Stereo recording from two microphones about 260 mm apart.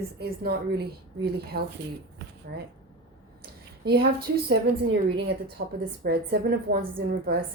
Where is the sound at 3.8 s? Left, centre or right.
Right.